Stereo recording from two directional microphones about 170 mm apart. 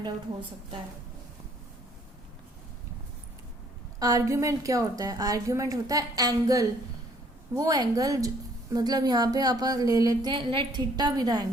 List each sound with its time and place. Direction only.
4.0 s a woman's voice: 20° right (ahead or behind)